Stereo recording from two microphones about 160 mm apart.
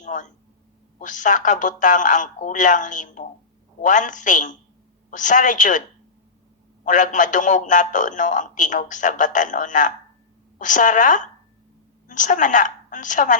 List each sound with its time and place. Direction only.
0.0 s a sound: 50° left (ahead or behind)
0.9 s a man's voice: 50° left (ahead or behind)
6.8 s a man's voice: 50° left (ahead or behind)